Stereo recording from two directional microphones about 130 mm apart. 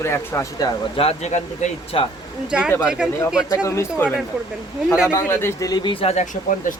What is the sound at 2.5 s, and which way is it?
Speech, 5° right (ahead or behind).